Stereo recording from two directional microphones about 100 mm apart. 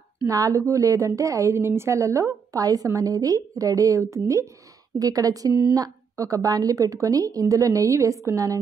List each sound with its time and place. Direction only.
0.3 s a woman's voice: 35° right (ahead or behind)